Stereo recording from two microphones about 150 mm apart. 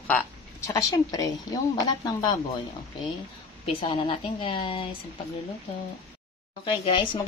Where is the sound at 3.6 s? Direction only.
35° left (ahead or behind).